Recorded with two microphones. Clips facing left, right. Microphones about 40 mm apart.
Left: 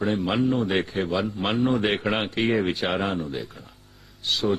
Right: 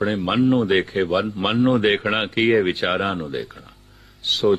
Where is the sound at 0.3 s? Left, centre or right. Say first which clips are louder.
Right 8 dB; right.